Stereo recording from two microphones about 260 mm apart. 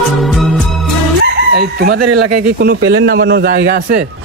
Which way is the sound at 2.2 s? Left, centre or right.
Right.